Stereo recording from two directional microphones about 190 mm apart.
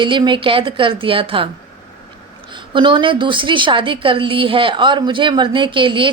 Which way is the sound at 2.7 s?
25° right (ahead or behind).